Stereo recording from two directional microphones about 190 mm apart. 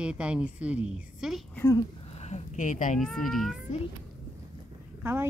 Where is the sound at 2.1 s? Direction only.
35° left (ahead or behind).